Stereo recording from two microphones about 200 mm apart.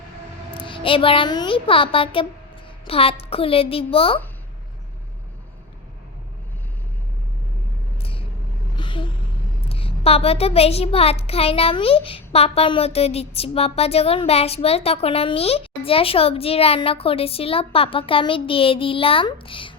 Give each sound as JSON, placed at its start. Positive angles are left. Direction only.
{"t": 0.5, "sound": "a woman's voice", "side_deg": 25}
{"t": 8.7, "sound": "vehicle", "side_deg": 25}
{"t": 9.6, "sound": "a child's voice", "side_deg": 30}